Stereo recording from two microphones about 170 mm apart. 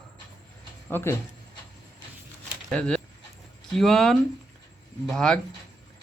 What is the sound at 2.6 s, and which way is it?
Speech, 5° left (ahead or behind).